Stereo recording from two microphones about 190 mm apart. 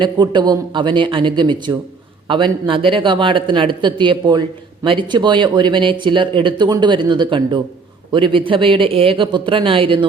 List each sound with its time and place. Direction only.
0.0 s speech: 25° right (ahead or behind)